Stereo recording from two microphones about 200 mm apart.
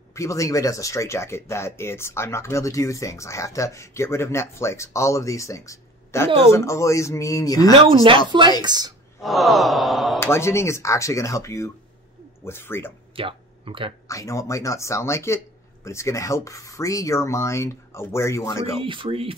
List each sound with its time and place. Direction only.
0.1 s speech: 15° left (ahead or behind)
7.7 s speech: 25° right (ahead or behind)
9.2 s sigh: centre (ahead or behind)
10.2 s speech: 15° left (ahead or behind)
13.1 s a sound: 25° right (ahead or behind)
14.0 s speech: 15° left (ahead or behind)
18.8 s speech: 25° right (ahead or behind)